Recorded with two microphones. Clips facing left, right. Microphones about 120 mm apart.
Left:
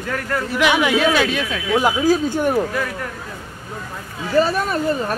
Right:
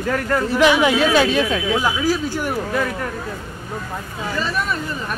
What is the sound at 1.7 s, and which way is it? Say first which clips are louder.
Speech: left 7 dB; 20° left (ahead or behind).